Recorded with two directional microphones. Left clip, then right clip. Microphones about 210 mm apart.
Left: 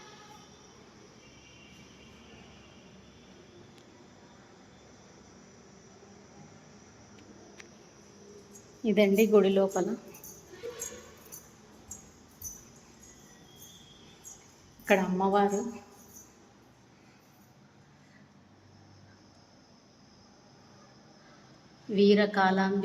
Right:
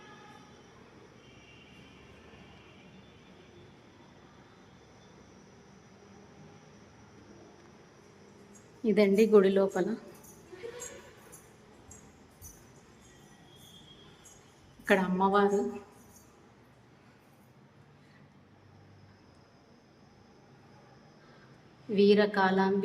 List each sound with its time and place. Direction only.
8.8 s a woman's voice: 5° right (ahead or behind)
14.8 s a woman's voice: 10° right (ahead or behind)
21.9 s a woman's voice: centre (ahead or behind)